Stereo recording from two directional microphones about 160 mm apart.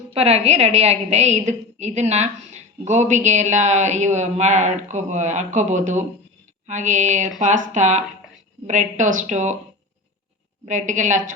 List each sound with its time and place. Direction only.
0.1 s a woman's voice: 40° right (ahead or behind)
10.7 s a woman's voice: 50° right (ahead or behind)